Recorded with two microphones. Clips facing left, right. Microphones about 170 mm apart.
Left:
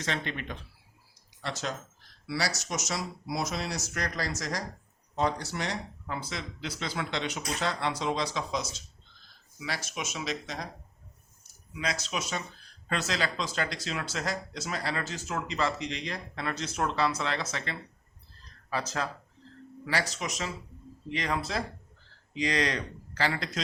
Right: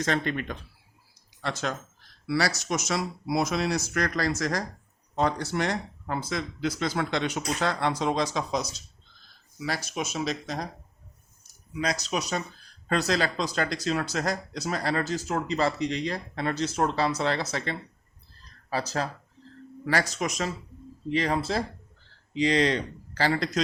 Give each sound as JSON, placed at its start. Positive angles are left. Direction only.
{"t": 0.0, "sound": "speech", "side_deg": -45}
{"t": 1.4, "sound": "speech", "side_deg": -60}
{"t": 11.8, "sound": "speech", "side_deg": -40}
{"t": 19.8, "sound": "speech", "side_deg": -45}
{"t": 21.1, "sound": "speech", "side_deg": -35}